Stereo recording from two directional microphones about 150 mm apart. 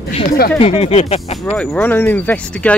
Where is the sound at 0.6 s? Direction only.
40° left (ahead or behind).